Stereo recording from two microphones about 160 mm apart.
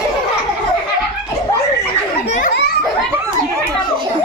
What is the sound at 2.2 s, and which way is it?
Children playing, 85° left.